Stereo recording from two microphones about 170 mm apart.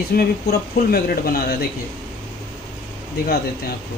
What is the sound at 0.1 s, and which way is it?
Speech, 65° left (ahead or behind).